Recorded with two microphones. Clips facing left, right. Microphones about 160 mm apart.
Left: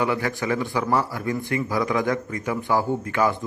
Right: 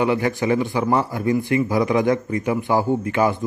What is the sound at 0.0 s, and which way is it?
Speech, 20° right (ahead or behind).